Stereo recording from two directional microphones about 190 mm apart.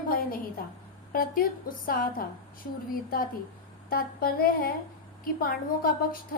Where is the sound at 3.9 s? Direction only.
50° left (ahead or behind).